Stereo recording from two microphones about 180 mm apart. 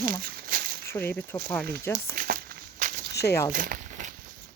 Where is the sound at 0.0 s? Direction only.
55° right (ahead or behind).